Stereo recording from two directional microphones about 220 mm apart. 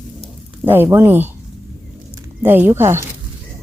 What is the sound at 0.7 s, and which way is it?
Speech, 10° right (ahead or behind).